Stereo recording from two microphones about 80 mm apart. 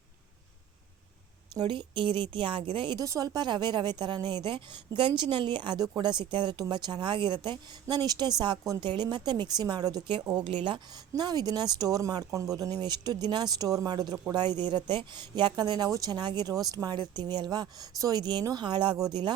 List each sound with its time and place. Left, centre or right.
1.6 s a woman's voice: right
3.0 s speech: right
4.4 s a woman's voice: right
10.4 s speech: right
11.1 s a woman's voice: right
15.9 s speech: right